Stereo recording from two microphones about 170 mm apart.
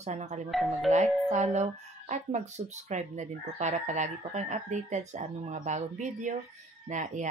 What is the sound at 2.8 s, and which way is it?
Speech, 45° right (ahead or behind).